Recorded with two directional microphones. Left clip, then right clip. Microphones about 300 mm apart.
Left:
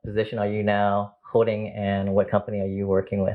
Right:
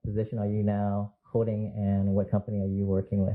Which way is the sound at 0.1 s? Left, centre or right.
Centre.